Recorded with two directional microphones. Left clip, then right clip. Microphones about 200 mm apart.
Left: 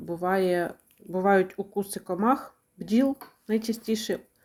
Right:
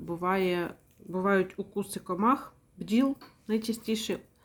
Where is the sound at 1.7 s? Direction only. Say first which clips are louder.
Left 4 dB; 35° right (ahead or behind).